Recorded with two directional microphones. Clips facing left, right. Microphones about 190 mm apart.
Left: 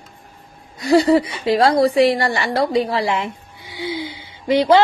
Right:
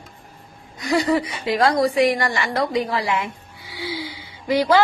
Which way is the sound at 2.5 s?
30° left (ahead or behind).